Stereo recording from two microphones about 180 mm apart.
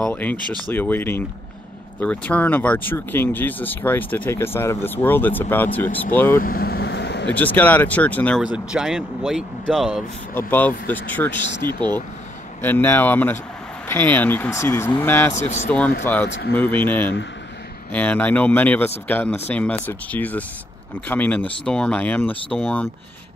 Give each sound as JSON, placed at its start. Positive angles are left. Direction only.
{"t": 0.0, "sound": "speech", "side_deg": 10}
{"t": 6.4, "sound": "vehicle", "side_deg": 55}
{"t": 7.3, "sound": "speech", "side_deg": 10}
{"t": 8.4, "sound": "speech", "side_deg": -5}
{"t": 10.3, "sound": "speech", "side_deg": 10}
{"t": 16.3, "sound": "speech", "side_deg": 70}
{"t": 16.5, "sound": "speech", "side_deg": 10}